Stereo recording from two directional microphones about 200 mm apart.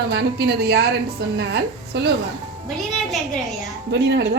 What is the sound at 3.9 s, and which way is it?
Speech, 55° right (ahead or behind).